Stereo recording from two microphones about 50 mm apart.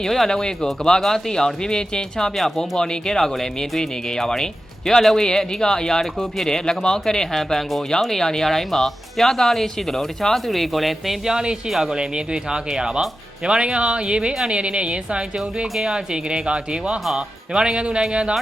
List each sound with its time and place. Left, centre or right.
0.0 s speech: centre
11.9 s speech: centre
15.7 s speech: centre
16.3 s speech: centre